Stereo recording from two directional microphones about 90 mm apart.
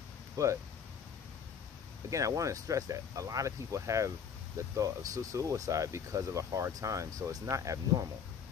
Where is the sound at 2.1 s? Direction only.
35° right (ahead or behind).